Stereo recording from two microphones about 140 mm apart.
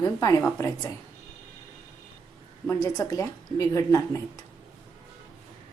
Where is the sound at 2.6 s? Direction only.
25° left (ahead or behind).